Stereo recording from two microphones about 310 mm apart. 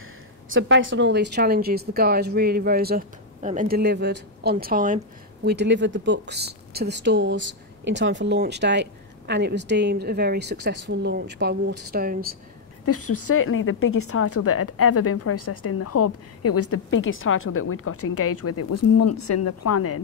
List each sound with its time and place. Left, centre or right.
0.5 s a woman's voice: right
12.8 s a woman's voice: left